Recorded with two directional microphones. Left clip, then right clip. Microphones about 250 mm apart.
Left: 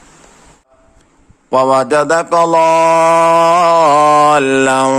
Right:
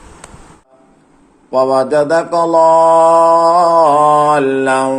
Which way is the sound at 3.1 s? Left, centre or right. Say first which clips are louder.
Even; left.